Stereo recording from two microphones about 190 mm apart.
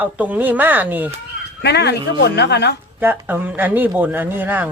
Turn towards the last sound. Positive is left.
turn(degrees=-10)  # may be behind; listen again after turning